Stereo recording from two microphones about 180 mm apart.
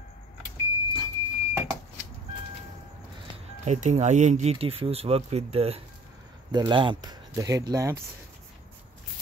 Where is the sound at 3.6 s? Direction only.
40° right (ahead or behind); by 7.9 s 20° right (ahead or behind).